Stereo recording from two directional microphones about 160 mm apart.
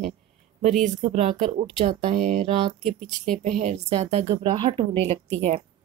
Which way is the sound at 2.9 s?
5° left (ahead or behind).